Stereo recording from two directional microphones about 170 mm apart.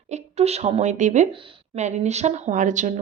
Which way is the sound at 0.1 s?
40° right (ahead or behind).